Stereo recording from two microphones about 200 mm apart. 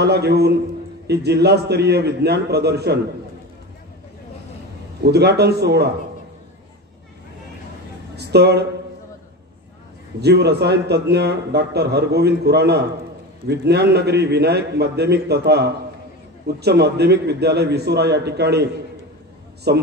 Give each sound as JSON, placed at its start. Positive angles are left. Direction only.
{"t": 0.0, "sound": "a man's voice", "side_deg": -55}
{"t": 5.0, "sound": "a man's voice", "side_deg": -55}
{"t": 8.2, "sound": "speech", "side_deg": -55}
{"t": 10.2, "sound": "a man's voice", "side_deg": -55}